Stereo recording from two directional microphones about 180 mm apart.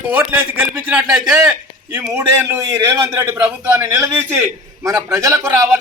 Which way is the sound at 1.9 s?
15° right (ahead or behind).